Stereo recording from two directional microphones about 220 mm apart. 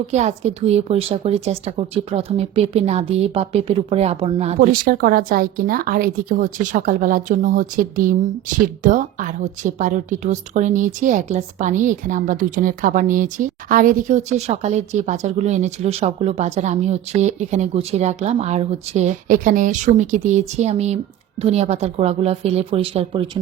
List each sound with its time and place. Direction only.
0.1 s a woman's voice: 30° right (ahead or behind)
4.7 s a woman's voice: 40° right (ahead or behind); by 23.4 s 25° right (ahead or behind)